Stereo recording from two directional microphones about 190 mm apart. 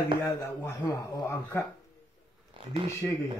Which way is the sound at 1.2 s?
10° left (ahead or behind).